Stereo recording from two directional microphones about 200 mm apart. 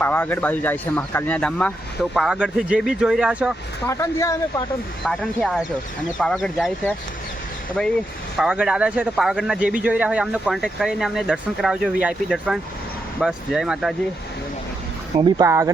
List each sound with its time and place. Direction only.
0.0 s speech: 10° left (ahead or behind)
3.8 s speech: 15° left (ahead or behind)
5.0 s speech: centre (ahead or behind)
7.8 s speech: centre (ahead or behind)
15.1 s speech: 20° right (ahead or behind)